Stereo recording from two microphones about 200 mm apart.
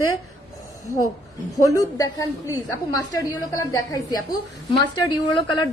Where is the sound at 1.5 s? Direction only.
15° left (ahead or behind).